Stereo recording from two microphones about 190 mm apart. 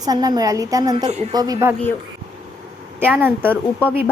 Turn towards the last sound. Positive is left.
turn(degrees=10)  # may be behind; listen again after turning